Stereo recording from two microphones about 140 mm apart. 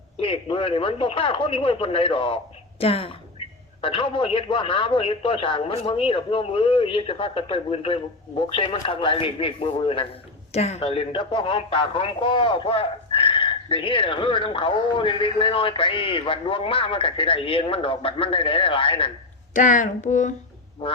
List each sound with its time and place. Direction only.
0.2 s a man's voice: 40° left (ahead or behind)
10.5 s a man's voice: 50° left (ahead or behind)
19.5 s speech: 65° left (ahead or behind)